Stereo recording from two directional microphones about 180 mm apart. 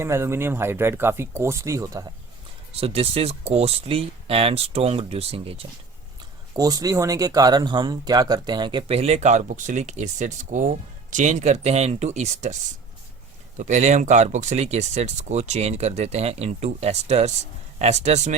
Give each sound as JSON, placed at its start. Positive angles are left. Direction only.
{"t": 0.0, "sound": "speech", "side_deg": -15}
{"t": 2.8, "sound": "speech", "side_deg": -35}
{"t": 6.6, "sound": "speech", "side_deg": -20}
{"t": 13.6, "sound": "speech", "side_deg": -40}